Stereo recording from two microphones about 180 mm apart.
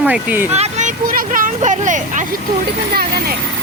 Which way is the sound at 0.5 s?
40° right (ahead or behind).